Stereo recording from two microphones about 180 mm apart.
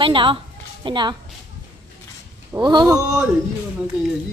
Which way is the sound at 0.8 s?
25° right (ahead or behind).